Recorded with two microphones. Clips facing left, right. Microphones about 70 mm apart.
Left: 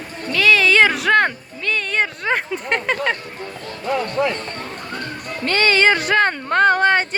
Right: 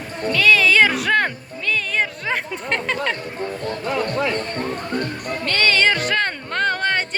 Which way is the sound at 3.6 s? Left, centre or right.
Right.